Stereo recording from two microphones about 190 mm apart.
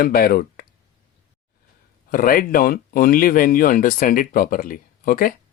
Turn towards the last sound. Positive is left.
turn(degrees=50)  # may be behind; listen again after turning